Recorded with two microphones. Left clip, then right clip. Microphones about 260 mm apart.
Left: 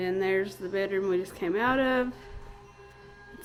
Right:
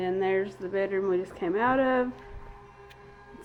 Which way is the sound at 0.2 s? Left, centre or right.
Left.